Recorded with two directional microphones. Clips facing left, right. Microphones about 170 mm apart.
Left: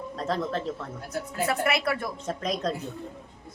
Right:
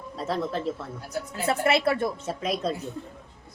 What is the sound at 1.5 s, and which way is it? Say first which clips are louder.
Speech: right 5 dB; 30° right (ahead or behind).